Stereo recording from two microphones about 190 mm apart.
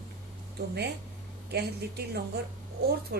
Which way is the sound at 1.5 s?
60° right (ahead or behind).